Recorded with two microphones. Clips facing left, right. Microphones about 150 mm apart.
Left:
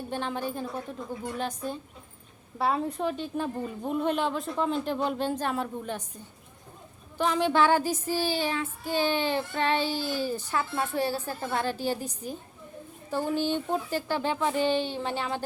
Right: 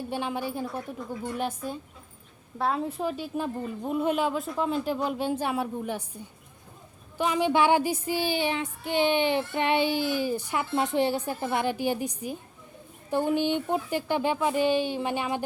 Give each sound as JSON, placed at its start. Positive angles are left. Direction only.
{"t": 0.1, "sound": "child singing", "side_deg": -10}